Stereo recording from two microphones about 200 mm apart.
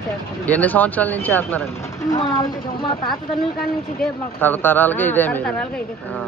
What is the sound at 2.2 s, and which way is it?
Speech, 20° left (ahead or behind).